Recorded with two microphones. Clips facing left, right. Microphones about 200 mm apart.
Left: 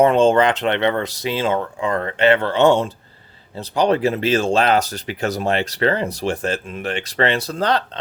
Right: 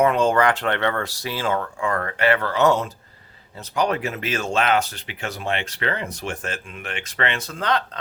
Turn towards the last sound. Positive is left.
turn(degrees=35)  # may be behind; listen again after turning